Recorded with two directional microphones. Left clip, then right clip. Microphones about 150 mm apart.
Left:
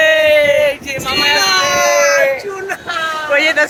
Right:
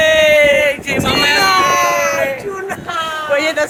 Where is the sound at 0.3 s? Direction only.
25° right (ahead or behind).